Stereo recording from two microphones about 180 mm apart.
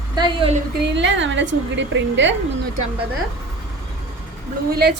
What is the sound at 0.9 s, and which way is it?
A woman's voice, 85° right.